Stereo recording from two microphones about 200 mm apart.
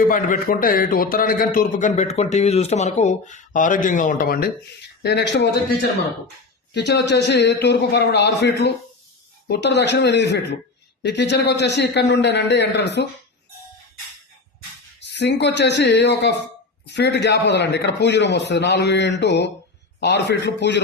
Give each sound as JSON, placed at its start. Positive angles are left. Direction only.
{"t": 0.1, "sound": "a man's voice", "side_deg": 45}
{"t": 5.0, "sound": "a man's voice", "side_deg": 60}
{"t": 6.7, "sound": "a man's voice", "side_deg": 55}
{"t": 15.0, "sound": "a man's voice", "side_deg": 60}